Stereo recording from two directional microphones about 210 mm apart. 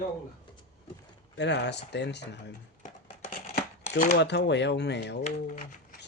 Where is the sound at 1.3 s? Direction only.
55° left (ahead or behind).